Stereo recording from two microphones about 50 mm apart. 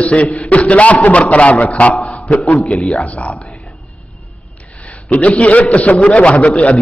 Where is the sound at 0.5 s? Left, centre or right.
Left.